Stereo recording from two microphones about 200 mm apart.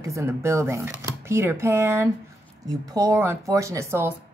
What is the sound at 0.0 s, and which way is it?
Speech, 15° right (ahead or behind).